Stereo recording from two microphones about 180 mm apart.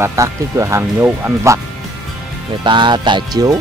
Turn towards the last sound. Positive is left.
turn(degrees=-20)  # may be behind; listen again after turning